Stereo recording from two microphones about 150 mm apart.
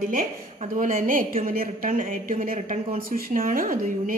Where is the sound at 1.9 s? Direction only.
65° right (ahead or behind).